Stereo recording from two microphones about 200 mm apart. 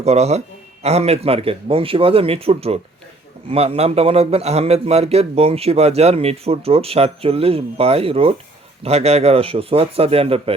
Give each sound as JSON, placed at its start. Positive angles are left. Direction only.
{"t": 0.0, "sound": "a man's voice", "side_deg": -30}